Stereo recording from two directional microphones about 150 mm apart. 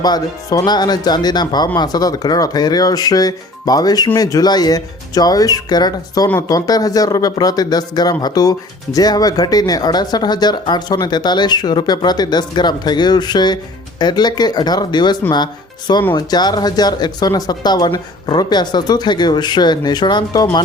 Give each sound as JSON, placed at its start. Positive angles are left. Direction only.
{"t": 0.0, "sound": "speech", "side_deg": 25}